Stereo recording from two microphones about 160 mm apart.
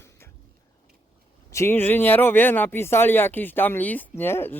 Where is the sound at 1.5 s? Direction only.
15° left (ahead or behind).